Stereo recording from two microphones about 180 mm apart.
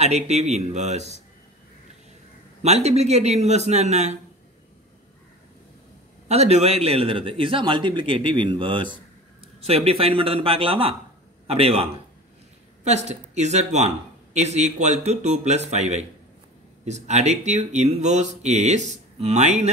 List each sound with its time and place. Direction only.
0.0 s speech: 35° right (ahead or behind)
2.6 s speech: 35° right (ahead or behind)
6.2 s a man's voice: 35° right (ahead or behind)